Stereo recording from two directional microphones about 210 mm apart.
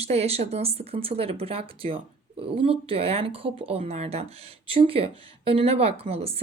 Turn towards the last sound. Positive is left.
turn(degrees=-30)  # may be behind; listen again after turning